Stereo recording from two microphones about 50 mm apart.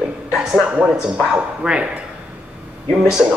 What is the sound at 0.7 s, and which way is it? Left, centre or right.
Speech, right.